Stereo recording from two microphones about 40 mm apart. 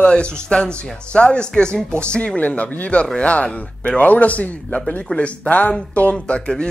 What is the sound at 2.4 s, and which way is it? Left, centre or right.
A man's voice, left.